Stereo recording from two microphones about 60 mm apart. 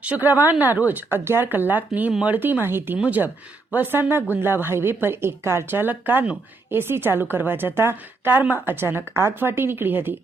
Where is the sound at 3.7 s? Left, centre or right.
Right.